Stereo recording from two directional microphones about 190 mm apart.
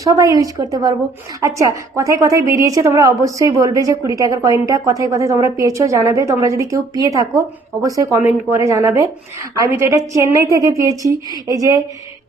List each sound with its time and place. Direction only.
0.0 s a woman's voice: 20° right (ahead or behind)